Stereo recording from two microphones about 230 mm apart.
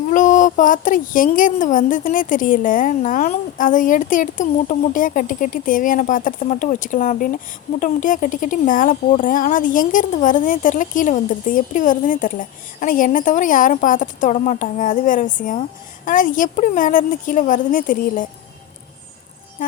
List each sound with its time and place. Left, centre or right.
0.1 s speech: left